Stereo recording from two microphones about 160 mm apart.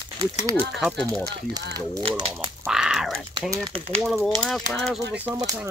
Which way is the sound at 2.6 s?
5° right (ahead or behind).